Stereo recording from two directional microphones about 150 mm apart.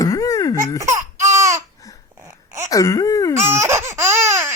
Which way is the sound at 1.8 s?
20° left (ahead or behind).